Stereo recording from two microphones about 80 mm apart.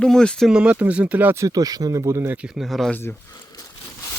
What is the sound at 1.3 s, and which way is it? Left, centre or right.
Speech, right.